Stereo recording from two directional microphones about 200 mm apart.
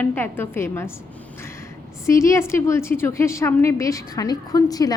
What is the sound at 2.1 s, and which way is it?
A woman's voice, 15° left (ahead or behind).